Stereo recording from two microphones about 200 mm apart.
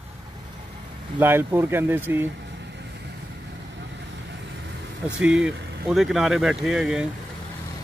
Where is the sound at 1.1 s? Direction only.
10° right (ahead or behind).